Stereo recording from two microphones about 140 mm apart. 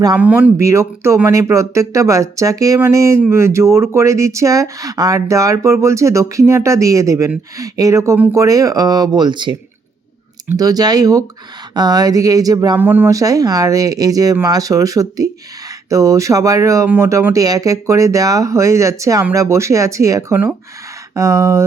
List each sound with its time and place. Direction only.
0.2 s speech: 10° right (ahead or behind)
0.5 s speech: 20° right (ahead or behind)
10.6 s speech: 25° right (ahead or behind)
12.8 s speech: 15° right (ahead or behind)